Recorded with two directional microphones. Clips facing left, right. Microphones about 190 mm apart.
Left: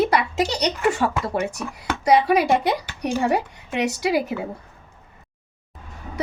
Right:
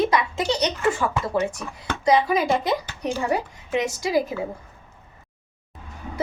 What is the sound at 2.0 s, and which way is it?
Speech, 65° left (ahead or behind).